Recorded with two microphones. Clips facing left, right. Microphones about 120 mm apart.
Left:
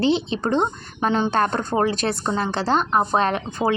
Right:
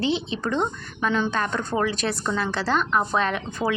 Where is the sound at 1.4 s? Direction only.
45° left (ahead or behind).